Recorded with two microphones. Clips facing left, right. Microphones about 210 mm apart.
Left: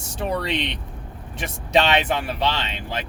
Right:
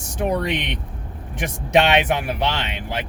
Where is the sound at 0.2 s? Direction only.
15° right (ahead or behind).